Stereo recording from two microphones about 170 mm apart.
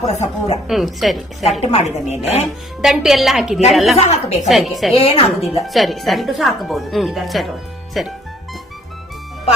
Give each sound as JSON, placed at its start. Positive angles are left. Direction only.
{"t": 0.0, "sound": "speech", "side_deg": 40}
{"t": 0.7, "sound": "speech", "side_deg": 0}
{"t": 1.6, "sound": "speech", "side_deg": 40}
{"t": 2.8, "sound": "speech", "side_deg": 0}
{"t": 3.9, "sound": "speech", "side_deg": 40}
{"t": 4.4, "sound": "speech", "side_deg": 0}
{"t": 4.9, "sound": "speech", "side_deg": 35}
{"t": 5.6, "sound": "speech", "side_deg": 0}